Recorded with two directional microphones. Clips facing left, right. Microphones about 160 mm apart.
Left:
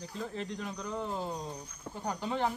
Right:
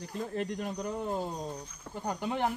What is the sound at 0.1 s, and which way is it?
Speech, 50° right (ahead or behind).